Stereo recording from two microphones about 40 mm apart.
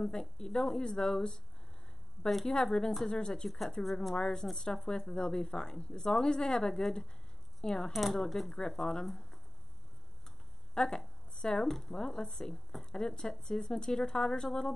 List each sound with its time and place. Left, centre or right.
0.1 s speech: centre
2.2 s speech: centre
2.5 s speech: centre
3.4 s speech: centre
7.9 s speech: centre
8.5 s speech: centre
9.0 s speech: centre
10.7 s a sound: centre
11.3 s speech: centre
11.6 s speech: centre